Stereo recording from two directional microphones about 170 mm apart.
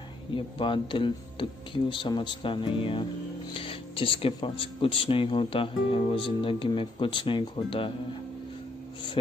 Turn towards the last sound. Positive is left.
turn(degrees=30)  # may be behind; listen again after turning